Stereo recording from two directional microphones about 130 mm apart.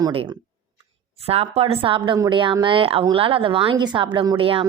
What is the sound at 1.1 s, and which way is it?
A woman's voice, 50° right (ahead or behind).